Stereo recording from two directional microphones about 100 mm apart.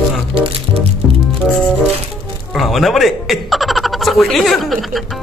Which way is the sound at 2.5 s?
Centre (ahead or behind).